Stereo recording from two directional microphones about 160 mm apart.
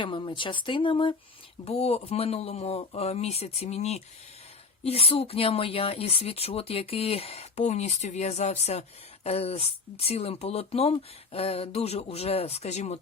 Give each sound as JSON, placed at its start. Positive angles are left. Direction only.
{"t": 0.0, "sound": "speech", "side_deg": 30}